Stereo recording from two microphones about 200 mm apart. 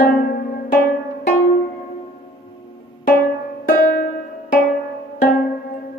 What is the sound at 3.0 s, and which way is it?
Music, 45° left (ahead or behind).